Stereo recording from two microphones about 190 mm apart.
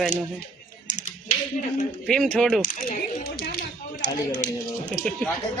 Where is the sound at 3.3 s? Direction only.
50° left (ahead or behind).